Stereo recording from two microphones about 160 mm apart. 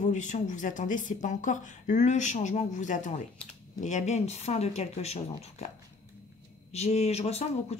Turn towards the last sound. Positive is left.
turn(degrees=40)  # may be behind; listen again after turning